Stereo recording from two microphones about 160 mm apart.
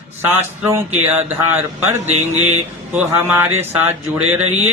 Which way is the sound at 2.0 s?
45° right (ahead or behind).